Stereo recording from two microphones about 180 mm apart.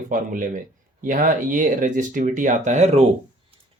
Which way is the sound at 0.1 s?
45° right (ahead or behind).